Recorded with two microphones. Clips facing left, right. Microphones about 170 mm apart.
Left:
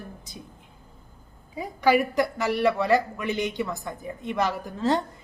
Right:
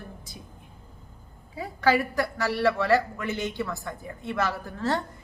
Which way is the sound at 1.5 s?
15° left (ahead or behind).